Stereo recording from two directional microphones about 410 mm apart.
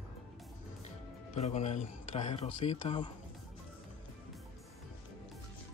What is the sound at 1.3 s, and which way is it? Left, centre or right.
Speech, centre.